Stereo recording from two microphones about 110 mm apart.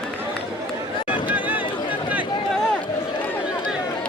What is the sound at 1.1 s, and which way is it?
Run, 15° right (ahead or behind).